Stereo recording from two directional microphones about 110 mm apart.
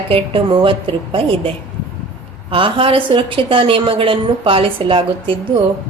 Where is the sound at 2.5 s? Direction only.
55° right (ahead or behind).